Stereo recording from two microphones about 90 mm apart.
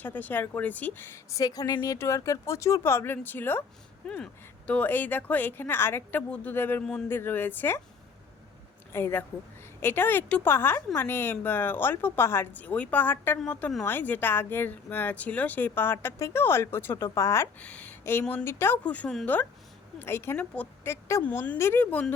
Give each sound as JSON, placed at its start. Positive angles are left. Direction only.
{"t": 0.0, "sound": "speech", "side_deg": 20}
{"t": 2.0, "sound": "speech", "side_deg": 35}
{"t": 8.9, "sound": "a woman's voice", "side_deg": 25}
{"t": 17.6, "sound": "a woman's voice", "side_deg": 15}
{"t": 18.0, "sound": "speech", "side_deg": 25}
{"t": 18.8, "sound": "a woman's voice", "side_deg": 15}
{"t": 20.3, "sound": "a woman's voice", "side_deg": 15}
{"t": 20.8, "sound": "speech", "side_deg": 30}